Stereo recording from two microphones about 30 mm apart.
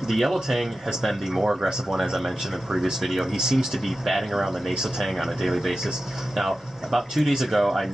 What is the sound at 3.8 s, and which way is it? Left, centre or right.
Speech, centre.